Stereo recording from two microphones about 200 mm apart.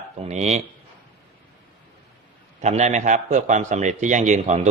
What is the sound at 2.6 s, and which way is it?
A man's voice, 35° right (ahead or behind).